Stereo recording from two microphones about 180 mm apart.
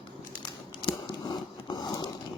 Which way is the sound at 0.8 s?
25° left (ahead or behind).